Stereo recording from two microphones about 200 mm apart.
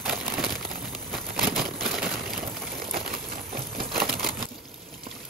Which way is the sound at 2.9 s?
50° right (ahead or behind).